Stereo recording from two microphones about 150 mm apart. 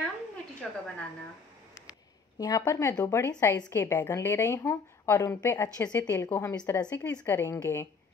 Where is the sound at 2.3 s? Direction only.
25° left (ahead or behind).